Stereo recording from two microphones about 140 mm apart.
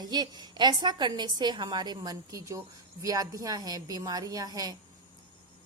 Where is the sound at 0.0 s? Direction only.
30° right (ahead or behind).